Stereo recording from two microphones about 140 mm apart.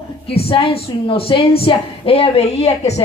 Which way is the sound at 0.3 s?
40° left (ahead or behind).